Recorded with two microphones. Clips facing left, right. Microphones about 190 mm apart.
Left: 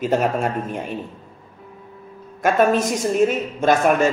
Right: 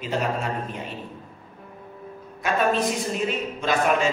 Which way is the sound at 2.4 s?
45° left (ahead or behind).